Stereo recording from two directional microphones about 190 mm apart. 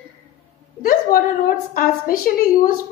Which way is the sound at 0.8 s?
50° left (ahead or behind).